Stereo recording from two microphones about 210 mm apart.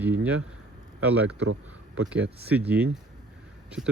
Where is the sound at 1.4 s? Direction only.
70° right (ahead or behind).